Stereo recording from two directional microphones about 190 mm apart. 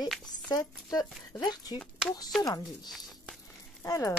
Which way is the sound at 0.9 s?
20° left (ahead or behind).